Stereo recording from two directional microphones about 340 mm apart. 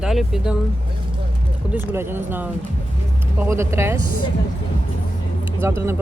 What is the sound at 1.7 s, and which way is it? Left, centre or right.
Speech, centre.